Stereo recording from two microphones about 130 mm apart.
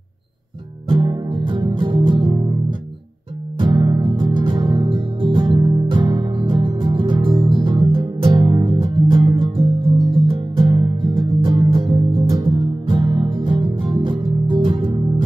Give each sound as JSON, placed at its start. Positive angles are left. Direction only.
{"t": 0.8, "sound": "music", "side_deg": -40}
{"t": 3.5, "sound": "music", "side_deg": -40}